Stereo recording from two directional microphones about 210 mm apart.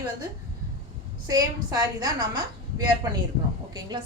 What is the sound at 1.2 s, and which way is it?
A woman's voice, 15° right (ahead or behind).